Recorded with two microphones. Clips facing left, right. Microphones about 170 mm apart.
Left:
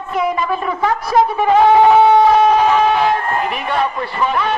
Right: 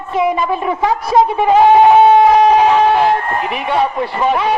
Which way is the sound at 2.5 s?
10° right (ahead or behind).